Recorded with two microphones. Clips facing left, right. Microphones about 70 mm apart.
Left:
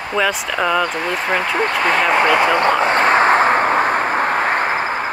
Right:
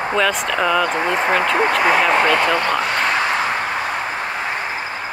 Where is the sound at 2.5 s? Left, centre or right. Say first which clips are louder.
Left 4 dB; left.